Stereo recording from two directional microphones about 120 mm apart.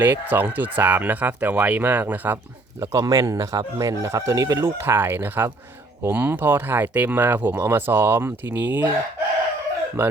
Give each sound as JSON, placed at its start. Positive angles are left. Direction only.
{"t": 0.0, "sound": "speech", "side_deg": -15}
{"t": 2.8, "sound": "speech", "side_deg": -30}
{"t": 4.9, "sound": "speech", "side_deg": -15}